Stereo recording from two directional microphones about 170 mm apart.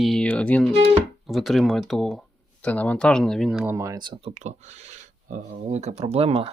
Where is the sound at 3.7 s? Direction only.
20° right (ahead or behind).